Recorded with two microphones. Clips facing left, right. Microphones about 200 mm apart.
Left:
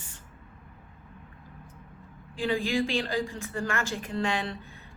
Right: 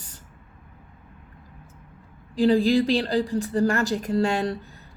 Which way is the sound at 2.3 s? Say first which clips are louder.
Right 9 dB; 35° right (ahead or behind).